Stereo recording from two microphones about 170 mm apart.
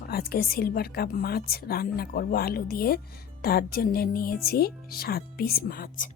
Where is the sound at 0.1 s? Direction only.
65° left (ahead or behind).